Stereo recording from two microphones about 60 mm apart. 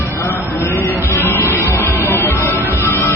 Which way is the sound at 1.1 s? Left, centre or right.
Left.